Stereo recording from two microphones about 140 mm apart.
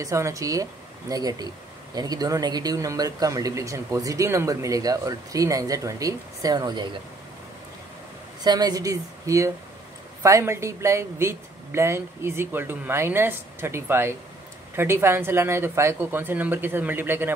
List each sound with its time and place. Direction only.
0.0 s speech: 20° right (ahead or behind)
8.5 s speech: 30° right (ahead or behind)